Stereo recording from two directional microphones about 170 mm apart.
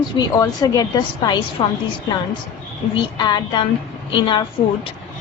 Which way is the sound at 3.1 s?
25° left (ahead or behind).